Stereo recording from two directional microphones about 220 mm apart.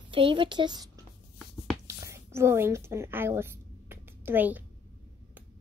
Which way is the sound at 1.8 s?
15° right (ahead or behind).